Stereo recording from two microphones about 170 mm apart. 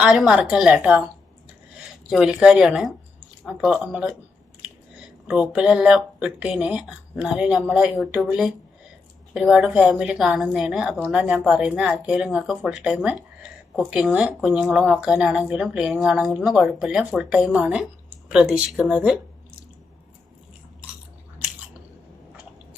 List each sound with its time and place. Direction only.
0.0 s speech: 5° right (ahead or behind)
2.0 s speech: 5° right (ahead or behind)
5.3 s speech: 5° right (ahead or behind)